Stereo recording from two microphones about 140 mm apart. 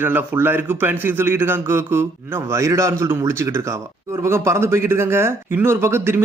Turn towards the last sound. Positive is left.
turn(degrees=-15)  # may be behind; listen again after turning